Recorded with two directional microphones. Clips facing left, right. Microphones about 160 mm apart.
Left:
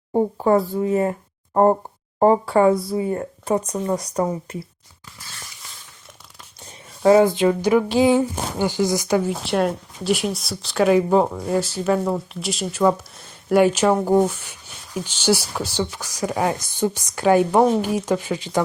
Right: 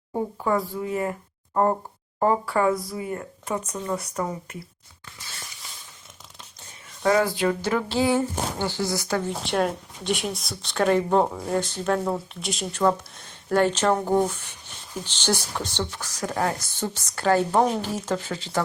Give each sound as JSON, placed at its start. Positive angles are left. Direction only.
{"t": 0.1, "sound": "speech", "side_deg": 30}
{"t": 2.1, "sound": "speech", "side_deg": 30}
{"t": 7.0, "sound": "speech", "side_deg": 25}
{"t": 9.4, "sound": "speech", "side_deg": 0}